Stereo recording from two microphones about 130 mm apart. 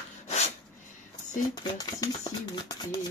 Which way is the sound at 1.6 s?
30° left (ahead or behind).